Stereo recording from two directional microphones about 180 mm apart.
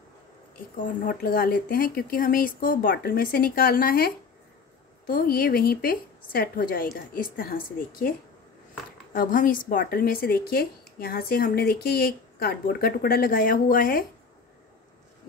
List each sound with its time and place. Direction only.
0.7 s speech: 50° left (ahead or behind)
9.1 s a woman's voice: 50° left (ahead or behind)